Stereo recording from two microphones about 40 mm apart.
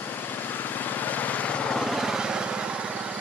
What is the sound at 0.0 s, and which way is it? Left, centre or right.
Vehicle, left.